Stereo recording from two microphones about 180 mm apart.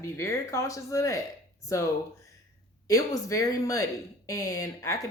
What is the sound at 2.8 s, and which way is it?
A woman's voice, 20° left (ahead or behind).